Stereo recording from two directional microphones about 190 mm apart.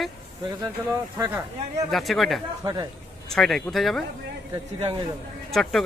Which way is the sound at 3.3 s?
Centre (ahead or behind).